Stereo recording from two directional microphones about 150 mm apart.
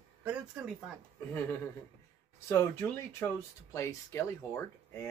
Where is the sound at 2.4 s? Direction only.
15° left (ahead or behind).